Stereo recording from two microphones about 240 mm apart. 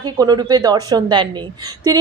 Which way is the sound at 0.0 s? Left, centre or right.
Centre.